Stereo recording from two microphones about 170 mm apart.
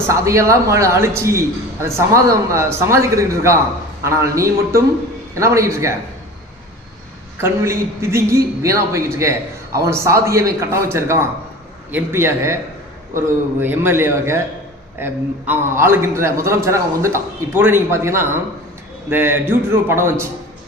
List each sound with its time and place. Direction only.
0.1 s a man's voice: 15° right (ahead or behind)
7.4 s a man's voice: 15° right (ahead or behind)